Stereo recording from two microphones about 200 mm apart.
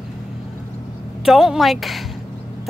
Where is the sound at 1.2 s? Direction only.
Centre (ahead or behind).